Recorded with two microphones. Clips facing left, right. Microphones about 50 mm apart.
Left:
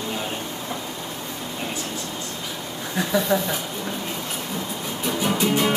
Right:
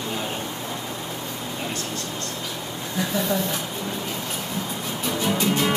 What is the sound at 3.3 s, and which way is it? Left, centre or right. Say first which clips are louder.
Speech: left 3 dB; left.